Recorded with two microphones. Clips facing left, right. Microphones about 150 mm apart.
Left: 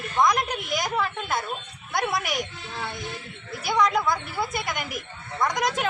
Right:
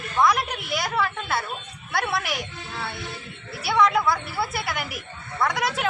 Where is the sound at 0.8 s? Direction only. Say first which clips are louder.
Right 3 dB; 15° left (ahead or behind).